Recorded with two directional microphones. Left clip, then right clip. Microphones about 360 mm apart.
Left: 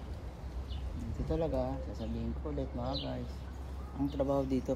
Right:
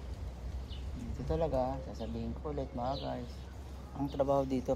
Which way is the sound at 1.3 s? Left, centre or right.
Centre.